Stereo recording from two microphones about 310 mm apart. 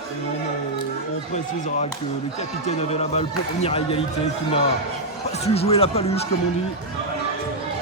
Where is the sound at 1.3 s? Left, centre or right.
Left.